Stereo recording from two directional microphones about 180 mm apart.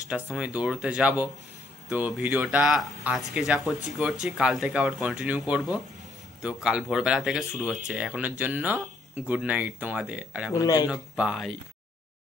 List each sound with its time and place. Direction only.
0.1 s speech: 5° right (ahead or behind)
10.5 s speech: 20° left (ahead or behind)
10.9 s speech: 5° right (ahead or behind)